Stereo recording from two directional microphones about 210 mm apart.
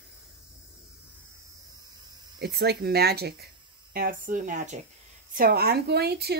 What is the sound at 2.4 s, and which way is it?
Speech, 50° right (ahead or behind).